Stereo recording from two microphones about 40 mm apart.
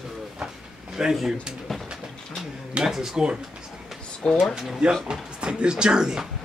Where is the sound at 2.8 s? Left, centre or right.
Centre.